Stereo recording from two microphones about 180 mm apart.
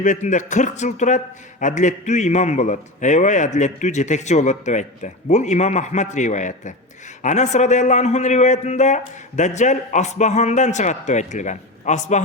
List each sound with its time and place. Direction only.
0.0 s a man's voice: 45° left (ahead or behind)